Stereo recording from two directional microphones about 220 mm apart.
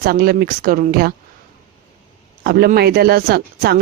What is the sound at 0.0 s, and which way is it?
Speech, 45° right (ahead or behind).